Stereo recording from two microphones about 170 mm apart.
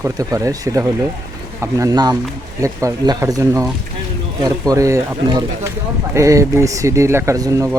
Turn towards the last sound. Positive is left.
turn(degrees=-20)  # may be behind; listen again after turning